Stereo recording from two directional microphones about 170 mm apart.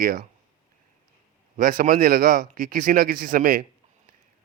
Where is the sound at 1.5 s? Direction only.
55° right (ahead or behind).